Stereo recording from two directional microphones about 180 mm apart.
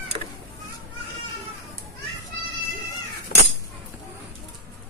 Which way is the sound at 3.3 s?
55° left (ahead or behind).